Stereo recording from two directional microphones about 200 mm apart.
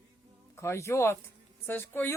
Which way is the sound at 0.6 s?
15° left (ahead or behind).